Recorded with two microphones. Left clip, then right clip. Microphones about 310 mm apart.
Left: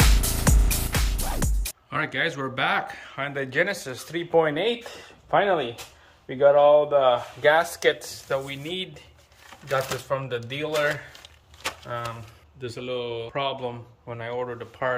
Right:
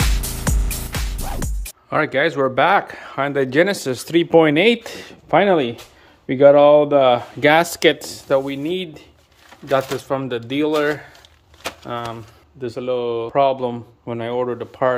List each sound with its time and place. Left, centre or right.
0.0 s music: centre
1.9 s speech: centre